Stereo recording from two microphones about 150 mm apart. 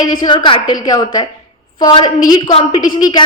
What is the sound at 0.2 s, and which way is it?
A woman's voice, 30° left (ahead or behind).